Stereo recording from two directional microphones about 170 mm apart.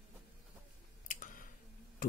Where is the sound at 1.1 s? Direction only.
50° left (ahead or behind).